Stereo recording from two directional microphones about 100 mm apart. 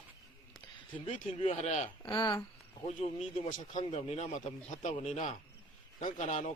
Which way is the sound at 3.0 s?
75° left (ahead or behind).